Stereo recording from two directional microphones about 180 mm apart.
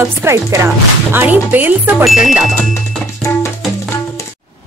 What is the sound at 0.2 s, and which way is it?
A man's voice, 15° right (ahead or behind).